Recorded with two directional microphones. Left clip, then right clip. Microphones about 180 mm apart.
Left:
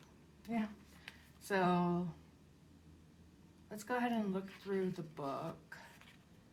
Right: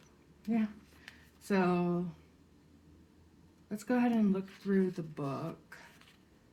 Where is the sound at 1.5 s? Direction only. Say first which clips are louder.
Right 3 dB; 40° left (ahead or behind).